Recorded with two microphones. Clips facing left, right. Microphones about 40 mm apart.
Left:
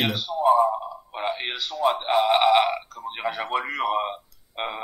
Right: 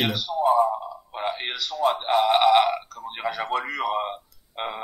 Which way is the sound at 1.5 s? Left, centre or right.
Centre.